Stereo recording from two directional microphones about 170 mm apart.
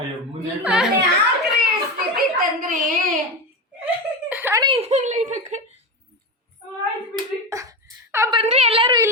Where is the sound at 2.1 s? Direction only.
55° right (ahead or behind).